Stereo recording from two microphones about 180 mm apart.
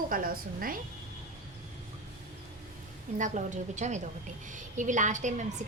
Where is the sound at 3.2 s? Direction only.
45° right (ahead or behind).